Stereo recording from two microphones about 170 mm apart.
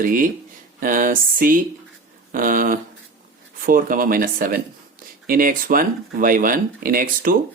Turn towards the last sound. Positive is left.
turn(degrees=-55)  # may be behind; listen again after turning